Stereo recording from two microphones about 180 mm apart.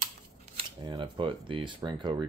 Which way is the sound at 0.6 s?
25° right (ahead or behind).